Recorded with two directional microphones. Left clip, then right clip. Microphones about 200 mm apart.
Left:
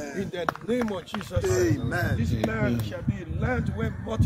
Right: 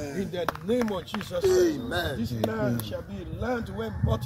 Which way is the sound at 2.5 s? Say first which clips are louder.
Even; 5° left (ahead or behind).